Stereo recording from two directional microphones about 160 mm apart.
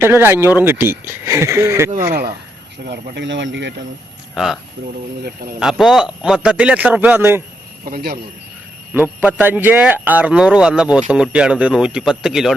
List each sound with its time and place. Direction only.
0.0 s a man's voice: 15° right (ahead or behind)
2.8 s speech: 90° right
4.4 s a man's voice: centre (ahead or behind)
7.9 s speech: 70° right (ahead or behind)
8.9 s a man's voice: 10° right (ahead or behind)